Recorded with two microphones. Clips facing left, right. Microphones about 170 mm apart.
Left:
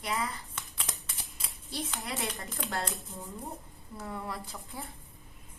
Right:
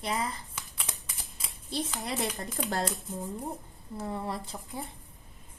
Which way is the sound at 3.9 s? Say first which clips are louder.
Right 4 dB; 30° right (ahead or behind).